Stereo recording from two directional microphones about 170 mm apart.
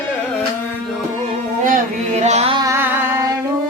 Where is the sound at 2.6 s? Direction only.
15° right (ahead or behind).